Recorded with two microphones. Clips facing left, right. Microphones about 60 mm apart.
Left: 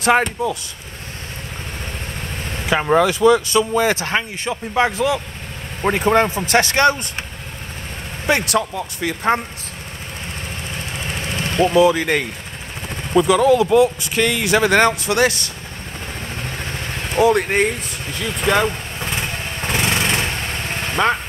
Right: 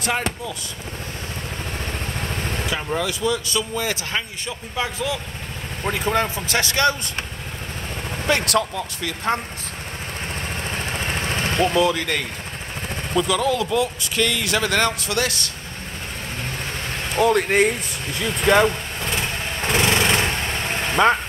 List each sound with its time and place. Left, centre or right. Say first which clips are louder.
2.7 s speech: left 12 dB; left
8.3 s speech: left 2 dB; centre
9.0 s speech: left 5 dB; left
11.6 s speech: left 6 dB; centre
17.1 s speech: left 2 dB; centre
19.7 s lawn mower: right 1 dB; centre
20.9 s speech: right 1 dB; centre